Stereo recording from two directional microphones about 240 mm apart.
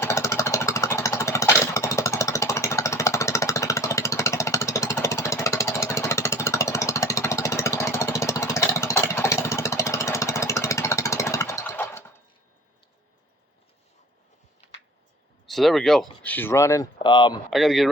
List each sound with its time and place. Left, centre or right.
0.0 s jackhammer: centre
14.6 s a sound: left
15.4 s speech: centre
17.5 s speech: centre